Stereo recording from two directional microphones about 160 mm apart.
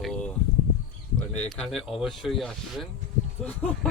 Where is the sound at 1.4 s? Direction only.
5° left (ahead or behind).